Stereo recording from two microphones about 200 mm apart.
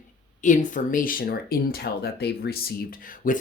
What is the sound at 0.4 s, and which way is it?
Speech, 40° left (ahead or behind).